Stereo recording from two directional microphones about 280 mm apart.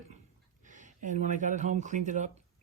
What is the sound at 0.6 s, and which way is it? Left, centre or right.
Speech, right.